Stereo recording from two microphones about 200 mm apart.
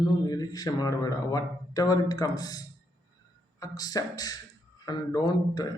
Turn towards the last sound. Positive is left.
turn(degrees=20)  # may be behind; listen again after turning